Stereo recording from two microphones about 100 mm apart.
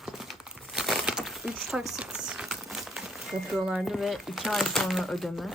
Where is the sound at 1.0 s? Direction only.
5° right (ahead or behind).